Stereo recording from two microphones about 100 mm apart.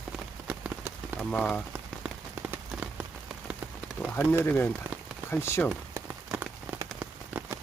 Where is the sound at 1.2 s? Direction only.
5° left (ahead or behind).